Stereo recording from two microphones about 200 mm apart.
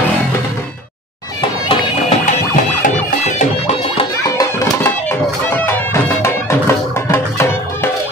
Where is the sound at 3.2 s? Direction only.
35° left (ahead or behind).